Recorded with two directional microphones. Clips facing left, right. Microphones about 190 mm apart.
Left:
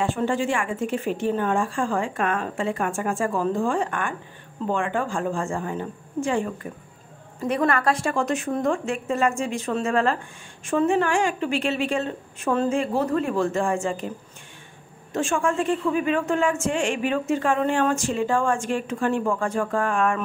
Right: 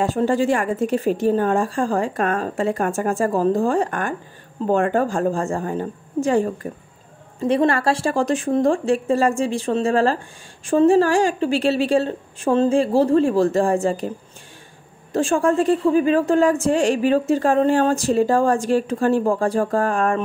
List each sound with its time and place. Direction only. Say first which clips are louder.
0.0 s speech: right 5 dB; 40° right (ahead or behind)
7.3 s speech: right 5 dB; 30° right (ahead or behind)
15.1 s speech: right 6 dB; 35° right (ahead or behind)